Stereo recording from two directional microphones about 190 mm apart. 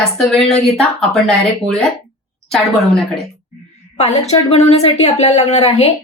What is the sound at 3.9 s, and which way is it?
Speech, 35° left (ahead or behind).